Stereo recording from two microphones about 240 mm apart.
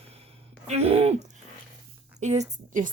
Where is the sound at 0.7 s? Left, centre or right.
Right.